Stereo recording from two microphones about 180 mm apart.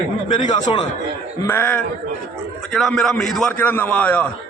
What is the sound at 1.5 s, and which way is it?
A man's voice, 10° left (ahead or behind).